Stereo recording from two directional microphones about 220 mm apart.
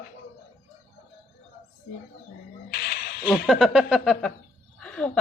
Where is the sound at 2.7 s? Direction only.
45° left (ahead or behind).